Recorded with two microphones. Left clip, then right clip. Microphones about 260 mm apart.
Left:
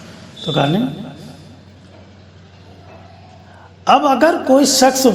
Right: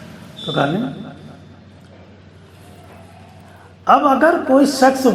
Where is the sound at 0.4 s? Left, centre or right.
Left.